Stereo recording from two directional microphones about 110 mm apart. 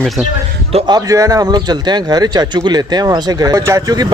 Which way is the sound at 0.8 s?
35° right (ahead or behind).